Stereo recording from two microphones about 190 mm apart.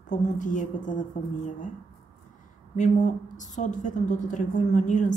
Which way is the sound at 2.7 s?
40° left (ahead or behind).